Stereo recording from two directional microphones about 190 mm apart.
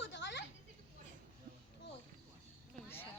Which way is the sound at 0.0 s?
70° left (ahead or behind).